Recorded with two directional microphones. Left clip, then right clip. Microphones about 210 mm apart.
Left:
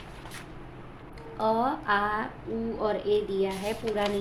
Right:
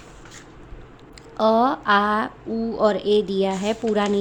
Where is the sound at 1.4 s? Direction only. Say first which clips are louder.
Right 8 dB; 50° right (ahead or behind).